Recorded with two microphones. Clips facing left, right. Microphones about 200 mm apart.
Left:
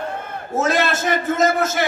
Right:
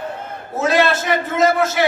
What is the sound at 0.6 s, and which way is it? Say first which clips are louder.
A man's voice: right 3 dB; 45° left (ahead or behind).